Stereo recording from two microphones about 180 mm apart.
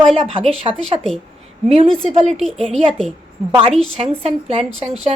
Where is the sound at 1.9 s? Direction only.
5° left (ahead or behind).